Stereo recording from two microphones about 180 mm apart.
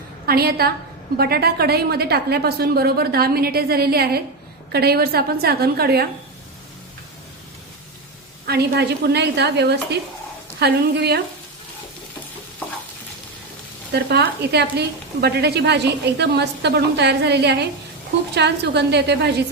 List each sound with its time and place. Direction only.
0.3 s a woman's voice: 60° right (ahead or behind)
8.4 s a woman's voice: 65° right (ahead or behind)
12.6 s stir: 10° left (ahead or behind)
13.9 s speech: 65° right (ahead or behind)